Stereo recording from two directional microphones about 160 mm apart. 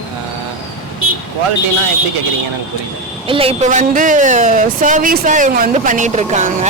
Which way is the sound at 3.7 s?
55° right (ahead or behind).